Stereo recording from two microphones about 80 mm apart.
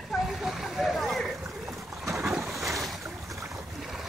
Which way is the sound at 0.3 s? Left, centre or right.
Centre.